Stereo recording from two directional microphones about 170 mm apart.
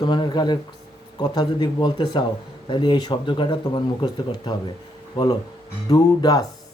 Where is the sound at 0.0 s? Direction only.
25° left (ahead or behind).